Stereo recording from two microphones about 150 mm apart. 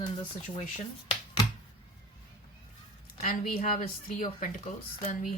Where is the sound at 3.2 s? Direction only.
60° left (ahead or behind).